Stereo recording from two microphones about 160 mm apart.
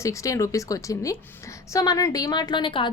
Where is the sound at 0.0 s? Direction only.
20° left (ahead or behind).